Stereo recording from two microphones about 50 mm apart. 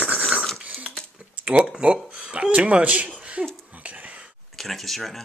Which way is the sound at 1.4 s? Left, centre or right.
Right.